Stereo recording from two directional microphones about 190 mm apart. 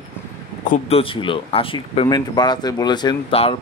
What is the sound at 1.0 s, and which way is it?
Speech, 25° left (ahead or behind).